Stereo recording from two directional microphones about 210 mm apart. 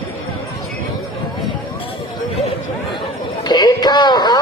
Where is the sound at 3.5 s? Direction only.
20° left (ahead or behind).